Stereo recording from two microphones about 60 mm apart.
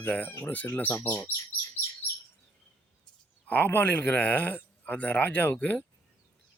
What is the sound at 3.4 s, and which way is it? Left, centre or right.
Speech, left.